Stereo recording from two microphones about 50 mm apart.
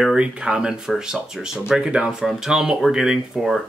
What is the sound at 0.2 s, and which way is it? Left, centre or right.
Speech, centre.